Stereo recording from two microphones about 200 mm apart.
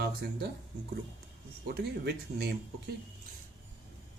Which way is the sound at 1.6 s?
55° right (ahead or behind).